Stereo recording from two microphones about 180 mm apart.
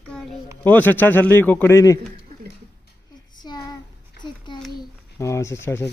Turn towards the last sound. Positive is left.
turn(degrees=15)  # may be behind; listen again after turning